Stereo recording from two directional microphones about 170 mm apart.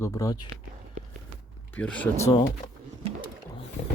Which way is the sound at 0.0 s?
20° left (ahead or behind).